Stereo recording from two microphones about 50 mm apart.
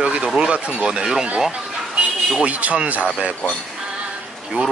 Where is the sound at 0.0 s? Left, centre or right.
Right.